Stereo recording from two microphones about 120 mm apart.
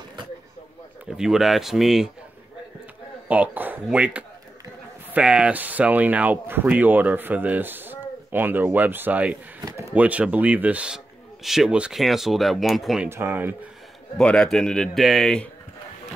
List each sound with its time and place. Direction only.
1.1 s speech: 5° right (ahead or behind)
3.3 s speech: 15° right (ahead or behind)
13.1 s speech: 20° right (ahead or behind)
14.1 s speech: 5° left (ahead or behind)